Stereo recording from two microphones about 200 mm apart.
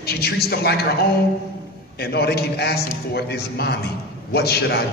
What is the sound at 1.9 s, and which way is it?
A man's voice, 50° left (ahead or behind).